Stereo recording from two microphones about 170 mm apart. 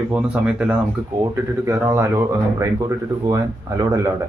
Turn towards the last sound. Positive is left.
turn(degrees=-20)  # may be behind; listen again after turning